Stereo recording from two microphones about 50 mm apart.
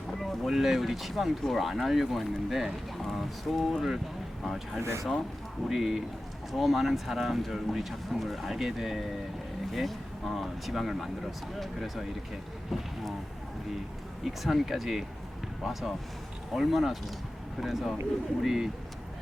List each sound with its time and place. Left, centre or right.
0.1 s boat: centre
0.4 s speech: centre
4.8 s speech: right
5.6 s speech: centre
14.3 s speech: centre